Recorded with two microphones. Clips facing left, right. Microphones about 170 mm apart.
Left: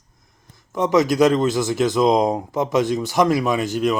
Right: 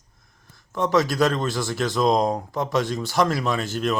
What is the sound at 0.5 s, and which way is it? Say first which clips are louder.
A man's voice: left 3 dB; 20° left (ahead or behind).